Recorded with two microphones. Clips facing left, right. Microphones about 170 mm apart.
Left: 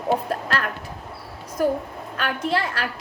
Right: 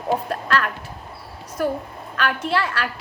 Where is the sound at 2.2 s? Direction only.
30° left (ahead or behind).